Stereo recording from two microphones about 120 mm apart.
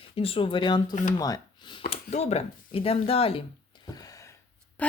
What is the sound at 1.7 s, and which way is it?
Speech, 60° left (ahead or behind).